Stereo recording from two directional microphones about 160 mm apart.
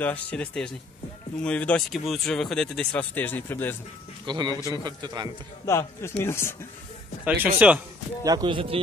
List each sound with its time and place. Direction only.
0.0 s speech: 10° left (ahead or behind)
4.3 s a man's voice: 30° right (ahead or behind)
5.7 s speech: 15° left (ahead or behind)
7.5 s speech: 10° right (ahead or behind)
8.2 s a man's voice: 25° right (ahead or behind)